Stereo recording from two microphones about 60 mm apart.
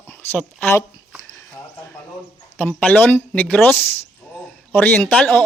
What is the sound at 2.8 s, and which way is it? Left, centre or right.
Speech, left.